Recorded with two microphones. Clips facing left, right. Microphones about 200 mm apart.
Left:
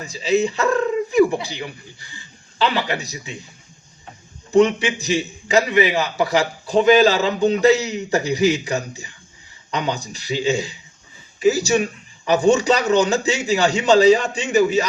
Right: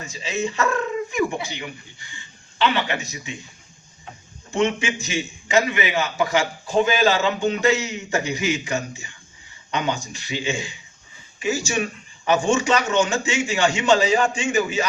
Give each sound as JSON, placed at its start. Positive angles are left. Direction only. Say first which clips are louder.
{"t": 0.0, "sound": "speech", "louder": "left 7 dB", "side_deg": 35}
{"t": 4.5, "sound": "a man's voice", "louder": "left 7 dB", "side_deg": 35}